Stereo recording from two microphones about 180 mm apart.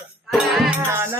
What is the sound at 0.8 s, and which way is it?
Speech, 15° right (ahead or behind).